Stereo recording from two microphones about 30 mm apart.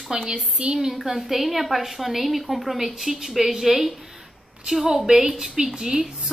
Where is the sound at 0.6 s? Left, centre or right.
Right.